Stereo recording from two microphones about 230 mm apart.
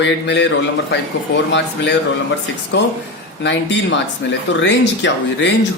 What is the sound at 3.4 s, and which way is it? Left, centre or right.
A man's voice, left.